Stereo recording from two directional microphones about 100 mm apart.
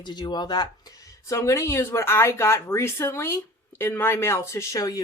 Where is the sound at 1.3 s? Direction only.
30° left (ahead or behind).